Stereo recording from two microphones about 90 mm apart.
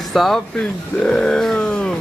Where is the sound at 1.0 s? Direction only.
10° left (ahead or behind).